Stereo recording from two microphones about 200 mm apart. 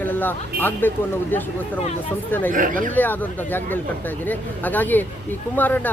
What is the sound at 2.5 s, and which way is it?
Speech, 40° right (ahead or behind).